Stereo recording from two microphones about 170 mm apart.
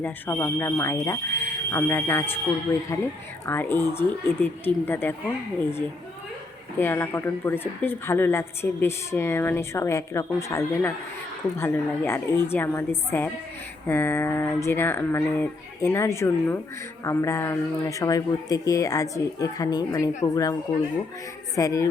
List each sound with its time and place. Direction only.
0.0 s speech: 15° left (ahead or behind)
6.7 s speech: 15° left (ahead or behind)